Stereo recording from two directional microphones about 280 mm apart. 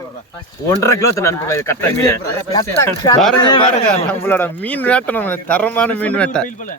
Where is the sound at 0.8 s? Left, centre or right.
Centre.